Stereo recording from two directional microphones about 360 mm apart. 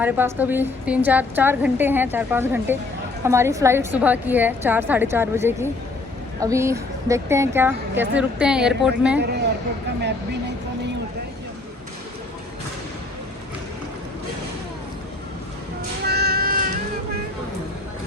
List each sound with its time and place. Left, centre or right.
0.0 s a woman's voice: centre
16.0 s music: right